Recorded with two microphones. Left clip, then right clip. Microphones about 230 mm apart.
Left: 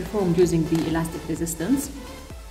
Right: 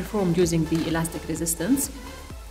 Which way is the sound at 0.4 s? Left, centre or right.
Right.